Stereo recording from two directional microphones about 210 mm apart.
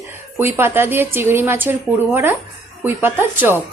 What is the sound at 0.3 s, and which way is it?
A woman's voice, 10° right (ahead or behind).